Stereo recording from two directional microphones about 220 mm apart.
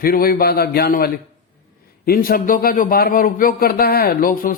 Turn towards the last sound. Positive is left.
turn(degrees=40)  # may be behind; listen again after turning